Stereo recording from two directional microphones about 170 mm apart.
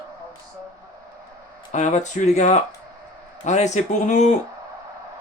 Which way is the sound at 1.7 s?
45° left (ahead or behind).